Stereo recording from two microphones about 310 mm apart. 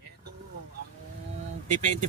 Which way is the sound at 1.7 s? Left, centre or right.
Right.